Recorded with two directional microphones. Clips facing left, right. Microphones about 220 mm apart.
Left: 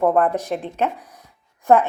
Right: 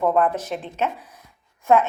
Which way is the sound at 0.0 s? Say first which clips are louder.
Left 2 dB; 50° left (ahead or behind).